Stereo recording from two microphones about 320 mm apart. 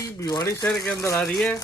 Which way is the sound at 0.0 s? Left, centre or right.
Centre.